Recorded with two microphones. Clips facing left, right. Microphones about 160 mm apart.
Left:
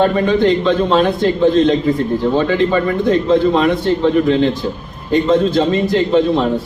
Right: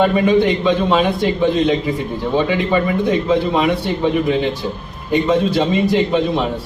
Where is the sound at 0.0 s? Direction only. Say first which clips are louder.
Left 1 dB; 10° right (ahead or behind).